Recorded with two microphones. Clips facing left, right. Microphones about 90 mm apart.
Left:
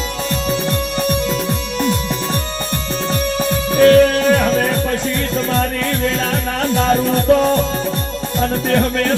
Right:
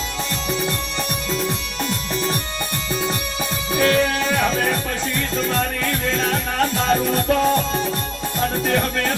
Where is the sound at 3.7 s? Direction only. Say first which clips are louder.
Left 9 dB; 35° left (ahead or behind).